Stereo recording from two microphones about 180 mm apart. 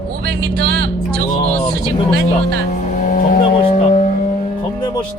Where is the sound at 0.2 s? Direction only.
60° right (ahead or behind).